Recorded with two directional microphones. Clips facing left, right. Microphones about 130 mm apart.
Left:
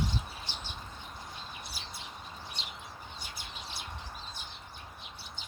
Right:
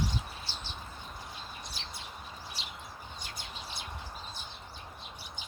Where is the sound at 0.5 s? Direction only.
20° left (ahead or behind).